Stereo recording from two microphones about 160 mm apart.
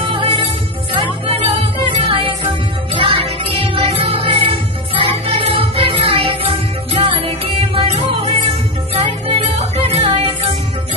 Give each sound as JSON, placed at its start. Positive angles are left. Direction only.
{"t": 0.1, "sound": "music", "side_deg": -35}